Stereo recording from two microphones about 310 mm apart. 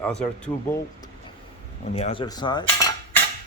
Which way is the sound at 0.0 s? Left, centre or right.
Centre.